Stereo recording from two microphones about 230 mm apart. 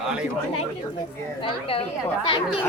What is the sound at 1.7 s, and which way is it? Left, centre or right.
Speech, left.